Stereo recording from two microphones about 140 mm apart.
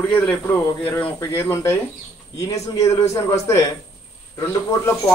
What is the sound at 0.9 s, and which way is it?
A man's voice, 15° left (ahead or behind).